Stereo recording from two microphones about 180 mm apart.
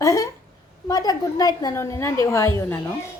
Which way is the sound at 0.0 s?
15° left (ahead or behind).